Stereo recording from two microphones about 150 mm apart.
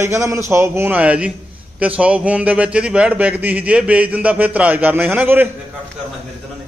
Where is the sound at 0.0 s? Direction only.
20° right (ahead or behind).